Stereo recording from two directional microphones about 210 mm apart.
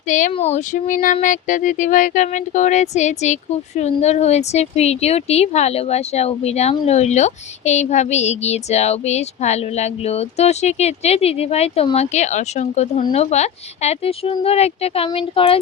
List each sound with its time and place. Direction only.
0.1 s speech: 35° left (ahead or behind)